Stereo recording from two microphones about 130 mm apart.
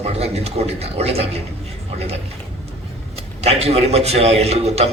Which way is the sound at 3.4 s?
50° right (ahead or behind).